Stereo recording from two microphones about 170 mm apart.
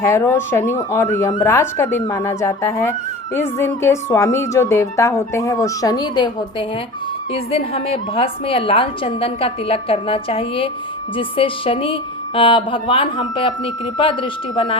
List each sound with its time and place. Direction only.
0.0 s a woman's voice: 15° left (ahead or behind); by 14.8 s 30° left (ahead or behind)